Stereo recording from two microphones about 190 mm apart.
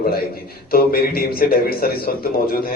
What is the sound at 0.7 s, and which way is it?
A man's voice, 50° left (ahead or behind).